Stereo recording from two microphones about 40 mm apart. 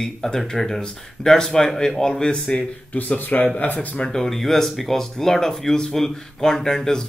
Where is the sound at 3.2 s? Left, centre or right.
Left.